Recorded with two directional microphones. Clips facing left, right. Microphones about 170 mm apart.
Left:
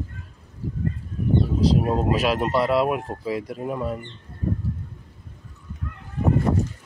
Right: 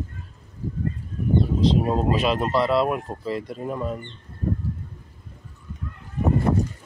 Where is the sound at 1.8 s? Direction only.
5° left (ahead or behind).